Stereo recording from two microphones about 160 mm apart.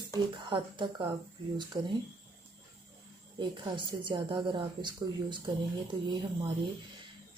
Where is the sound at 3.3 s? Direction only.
30° right (ahead or behind).